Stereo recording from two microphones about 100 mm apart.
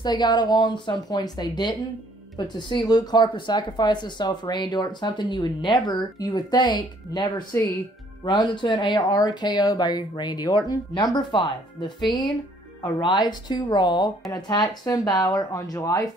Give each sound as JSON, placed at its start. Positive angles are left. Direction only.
{"t": 0.0, "sound": "speech", "side_deg": 45}